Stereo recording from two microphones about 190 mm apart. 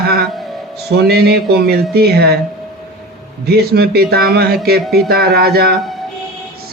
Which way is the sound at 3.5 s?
55° right (ahead or behind).